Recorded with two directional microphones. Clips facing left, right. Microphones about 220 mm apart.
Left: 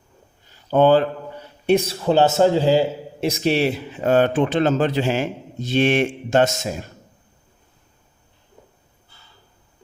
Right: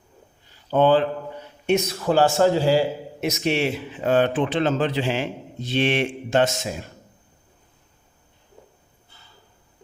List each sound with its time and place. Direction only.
0.7 s a man's voice: 45° left (ahead or behind)
1.6 s a man's voice: 30° left (ahead or behind)